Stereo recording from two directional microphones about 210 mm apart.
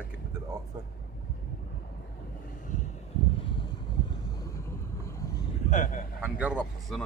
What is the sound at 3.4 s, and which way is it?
Vehicle, 25° left (ahead or behind).